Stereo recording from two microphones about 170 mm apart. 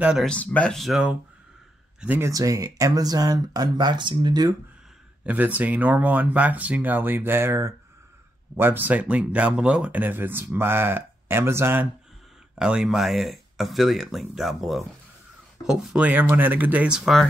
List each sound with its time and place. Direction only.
0.0 s speech: 5° right (ahead or behind)
0.3 s speech: 10° left (ahead or behind)
2.0 s speech: 10° right (ahead or behind)
5.2 s speech: 10° right (ahead or behind)